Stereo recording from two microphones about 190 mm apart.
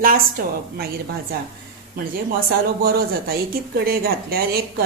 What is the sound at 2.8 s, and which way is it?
A woman's voice, 55° right (ahead or behind).